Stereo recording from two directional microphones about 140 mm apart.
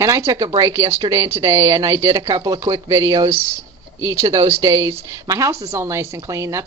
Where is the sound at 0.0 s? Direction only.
25° right (ahead or behind).